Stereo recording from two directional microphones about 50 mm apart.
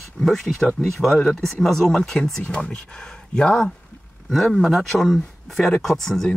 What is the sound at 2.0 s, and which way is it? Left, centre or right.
Speech, centre.